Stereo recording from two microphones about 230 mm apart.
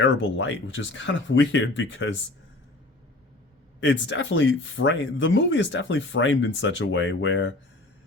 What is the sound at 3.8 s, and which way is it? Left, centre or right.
Speech, left.